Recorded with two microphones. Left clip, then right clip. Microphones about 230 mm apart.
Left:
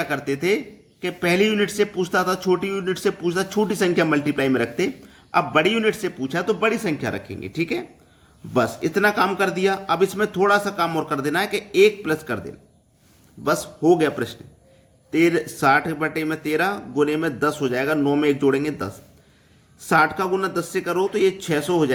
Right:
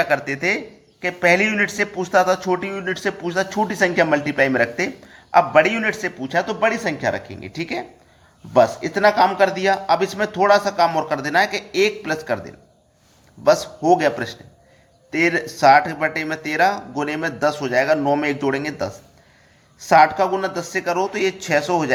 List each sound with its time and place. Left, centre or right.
0.0 s a man's voice: centre